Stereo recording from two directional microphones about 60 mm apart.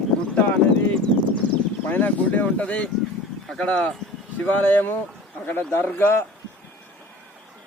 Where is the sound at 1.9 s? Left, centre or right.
Left.